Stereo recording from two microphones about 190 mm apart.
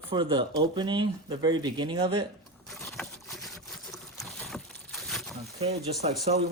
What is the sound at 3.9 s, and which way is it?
Boat, centre (ahead or behind).